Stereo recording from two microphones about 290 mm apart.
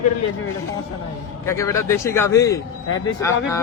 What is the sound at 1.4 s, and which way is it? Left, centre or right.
A man's voice, centre.